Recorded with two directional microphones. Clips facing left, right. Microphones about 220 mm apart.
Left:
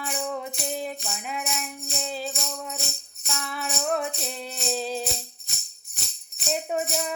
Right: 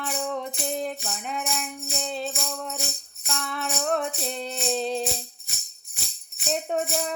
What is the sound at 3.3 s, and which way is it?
Music, 5° left (ahead or behind).